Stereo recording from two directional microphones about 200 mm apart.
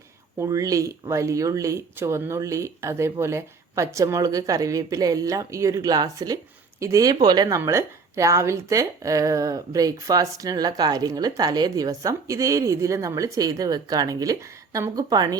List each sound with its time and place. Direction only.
0.3 s speech: 15° right (ahead or behind)